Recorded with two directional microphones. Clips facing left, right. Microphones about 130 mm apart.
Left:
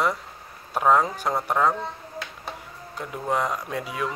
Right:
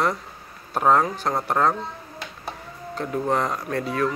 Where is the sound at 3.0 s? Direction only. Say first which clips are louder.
Right 3 dB; 10° left (ahead or behind).